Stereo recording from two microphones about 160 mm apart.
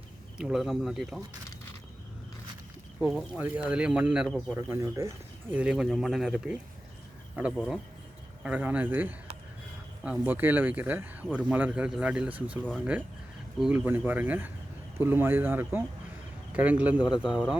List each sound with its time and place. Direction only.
0.3 s speech: 5° right (ahead or behind)
3.2 s speech: 10° right (ahead or behind)
4.5 s speech: 15° right (ahead or behind)
13.6 s speech: 10° right (ahead or behind)
17.0 s speech: 30° left (ahead or behind)